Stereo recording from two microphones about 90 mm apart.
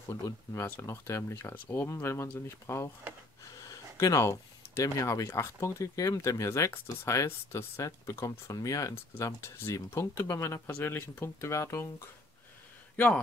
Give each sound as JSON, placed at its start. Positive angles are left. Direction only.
{"t": 0.1, "sound": "speech", "side_deg": 35}
{"t": 12.9, "sound": "speech", "side_deg": 20}